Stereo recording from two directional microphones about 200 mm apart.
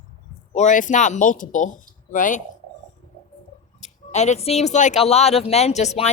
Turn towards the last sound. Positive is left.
turn(degrees=35)  # may be behind; listen again after turning